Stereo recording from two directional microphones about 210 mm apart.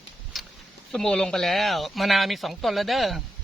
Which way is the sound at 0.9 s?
5° left (ahead or behind).